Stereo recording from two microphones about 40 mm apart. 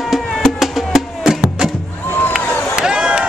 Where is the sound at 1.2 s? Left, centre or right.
Centre.